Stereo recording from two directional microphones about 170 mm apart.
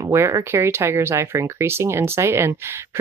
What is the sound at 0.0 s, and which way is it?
Speech, 15° right (ahead or behind).